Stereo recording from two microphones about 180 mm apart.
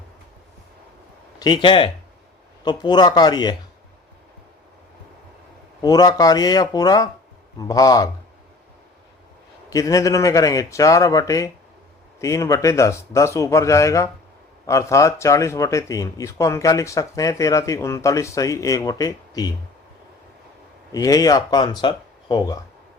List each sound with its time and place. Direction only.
1.4 s a man's voice: 25° left (ahead or behind)
5.8 s a man's voice: 20° left (ahead or behind)
9.6 s a man's voice: 20° left (ahead or behind)
20.9 s a man's voice: 20° left (ahead or behind)